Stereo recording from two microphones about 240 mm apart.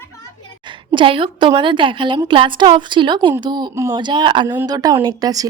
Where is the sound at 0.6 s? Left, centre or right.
Centre.